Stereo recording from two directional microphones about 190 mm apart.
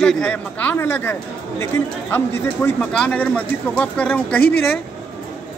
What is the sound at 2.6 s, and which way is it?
Speech, 5° left (ahead or behind).